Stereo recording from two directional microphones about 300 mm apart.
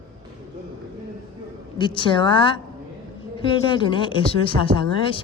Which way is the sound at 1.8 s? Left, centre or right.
Centre.